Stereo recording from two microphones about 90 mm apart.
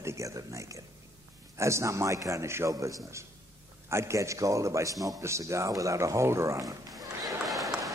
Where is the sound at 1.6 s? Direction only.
35° right (ahead or behind).